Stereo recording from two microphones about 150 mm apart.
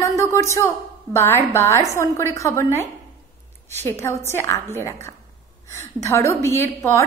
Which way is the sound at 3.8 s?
15° left (ahead or behind).